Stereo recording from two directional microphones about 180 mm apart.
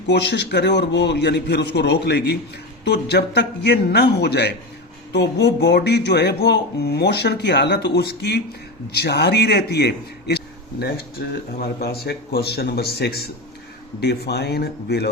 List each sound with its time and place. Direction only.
0.1 s a man's voice: 70° left (ahead or behind)